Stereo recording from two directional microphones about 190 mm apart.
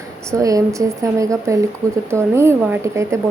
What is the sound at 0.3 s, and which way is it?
Speech, 15° right (ahead or behind).